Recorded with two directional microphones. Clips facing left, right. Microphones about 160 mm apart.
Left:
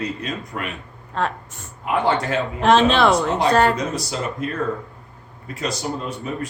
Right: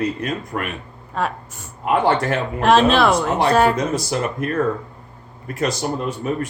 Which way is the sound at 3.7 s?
55° right (ahead or behind).